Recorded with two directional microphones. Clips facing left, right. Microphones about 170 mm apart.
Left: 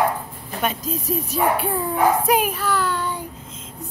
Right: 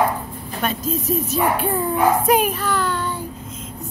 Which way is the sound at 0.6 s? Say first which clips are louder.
Even; 15° left (ahead or behind).